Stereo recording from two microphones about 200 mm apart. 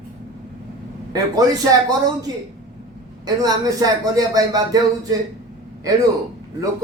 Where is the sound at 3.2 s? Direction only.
20° right (ahead or behind).